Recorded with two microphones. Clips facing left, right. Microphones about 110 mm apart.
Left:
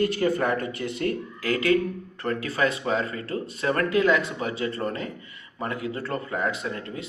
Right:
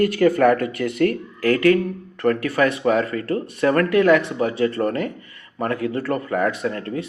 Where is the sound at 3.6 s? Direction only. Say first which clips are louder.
Right 6 dB; 55° right (ahead or behind).